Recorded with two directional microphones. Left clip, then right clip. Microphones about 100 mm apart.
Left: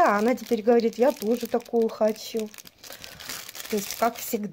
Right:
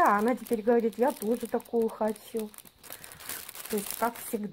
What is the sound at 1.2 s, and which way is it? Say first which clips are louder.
Speech: left 5 dB; 15° left (ahead or behind).